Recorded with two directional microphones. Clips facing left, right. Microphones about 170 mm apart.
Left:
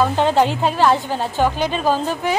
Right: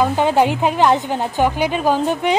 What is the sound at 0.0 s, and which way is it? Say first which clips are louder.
A woman's voice: right 1 dB; 10° right (ahead or behind).